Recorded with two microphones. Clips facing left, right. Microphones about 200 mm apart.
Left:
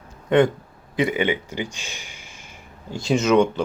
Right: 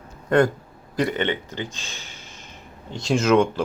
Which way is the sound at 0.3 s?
Centre (ahead or behind).